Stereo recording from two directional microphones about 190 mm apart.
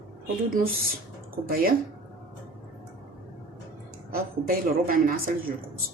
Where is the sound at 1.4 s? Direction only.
50° right (ahead or behind).